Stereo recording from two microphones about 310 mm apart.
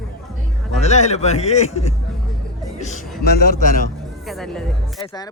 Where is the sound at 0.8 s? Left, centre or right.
Left.